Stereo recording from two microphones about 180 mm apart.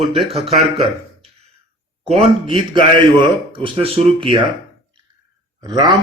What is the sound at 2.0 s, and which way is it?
A man's voice, 35° right (ahead or behind).